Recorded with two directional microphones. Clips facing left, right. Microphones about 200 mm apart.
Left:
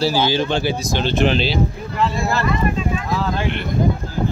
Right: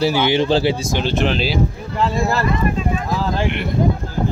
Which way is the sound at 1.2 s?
Centre (ahead or behind).